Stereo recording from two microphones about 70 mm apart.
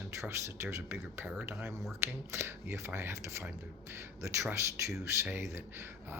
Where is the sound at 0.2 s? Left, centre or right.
Right.